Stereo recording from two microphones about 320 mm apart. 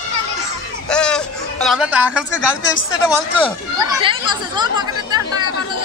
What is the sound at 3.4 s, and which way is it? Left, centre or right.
Speech, centre.